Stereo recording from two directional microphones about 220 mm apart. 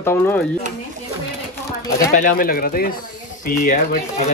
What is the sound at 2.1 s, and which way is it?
Speech, 40° left (ahead or behind).